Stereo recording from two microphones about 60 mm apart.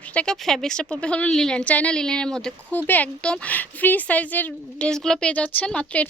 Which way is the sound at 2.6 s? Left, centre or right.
Left.